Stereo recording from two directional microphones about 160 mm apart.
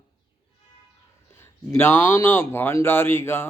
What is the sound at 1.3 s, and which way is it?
Speech, 15° left (ahead or behind).